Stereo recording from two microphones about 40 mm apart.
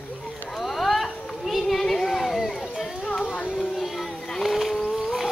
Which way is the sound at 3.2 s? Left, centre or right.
Left.